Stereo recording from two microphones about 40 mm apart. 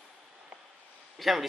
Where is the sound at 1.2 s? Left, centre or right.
Centre.